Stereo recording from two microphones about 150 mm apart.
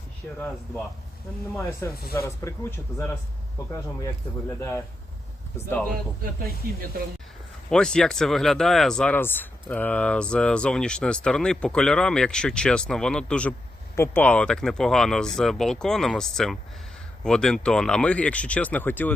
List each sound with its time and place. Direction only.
0.3 s speech: 10° left (ahead or behind)
1.8 s speech: 15° left (ahead or behind)
7.7 s speech: 5° left (ahead or behind)